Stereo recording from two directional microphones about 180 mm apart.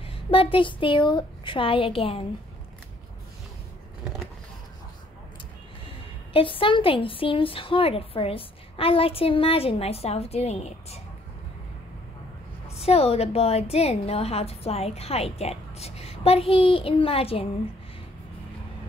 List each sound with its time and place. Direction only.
0.0 s a woman's voice: 30° left (ahead or behind)
5.9 s a woman's voice: 30° left (ahead or behind)
12.7 s a woman's voice: 35° left (ahead or behind)